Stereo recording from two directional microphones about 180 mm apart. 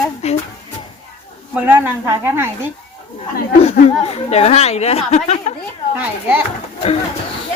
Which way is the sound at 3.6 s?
35° left (ahead or behind).